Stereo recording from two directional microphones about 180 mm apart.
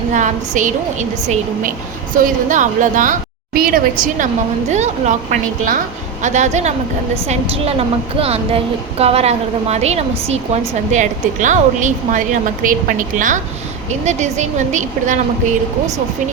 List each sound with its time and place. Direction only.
0.1 s a woman's voice: 45° right (ahead or behind)